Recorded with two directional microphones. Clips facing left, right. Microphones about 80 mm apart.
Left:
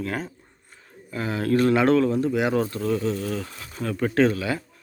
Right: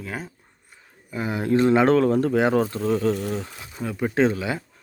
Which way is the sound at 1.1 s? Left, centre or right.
Centre.